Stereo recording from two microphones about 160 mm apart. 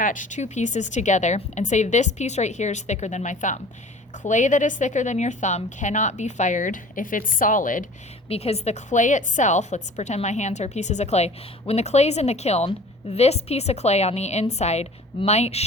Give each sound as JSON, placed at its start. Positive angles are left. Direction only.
{"t": 0.0, "sound": "a woman's voice", "side_deg": 55}
{"t": 8.3, "sound": "a woman's voice", "side_deg": 40}